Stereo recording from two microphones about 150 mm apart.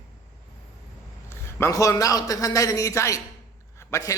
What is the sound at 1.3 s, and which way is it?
A man's voice, 15° left (ahead or behind).